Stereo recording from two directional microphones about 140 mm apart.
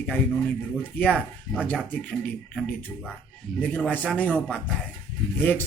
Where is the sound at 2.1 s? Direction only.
10° left (ahead or behind).